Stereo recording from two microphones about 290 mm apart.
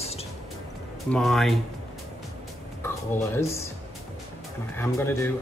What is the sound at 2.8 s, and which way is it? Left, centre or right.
Speech, centre.